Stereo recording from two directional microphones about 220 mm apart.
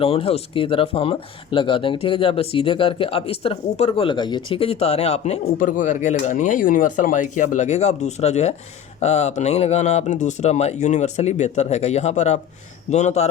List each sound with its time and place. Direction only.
0.0 s speech: 25° left (ahead or behind)